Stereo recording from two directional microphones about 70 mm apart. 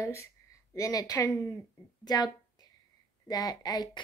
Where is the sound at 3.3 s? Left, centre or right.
Left.